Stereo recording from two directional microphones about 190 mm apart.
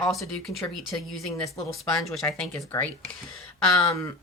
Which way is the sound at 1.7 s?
Centre (ahead or behind).